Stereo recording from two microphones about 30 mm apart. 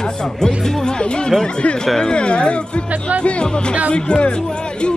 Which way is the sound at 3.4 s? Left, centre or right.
Left.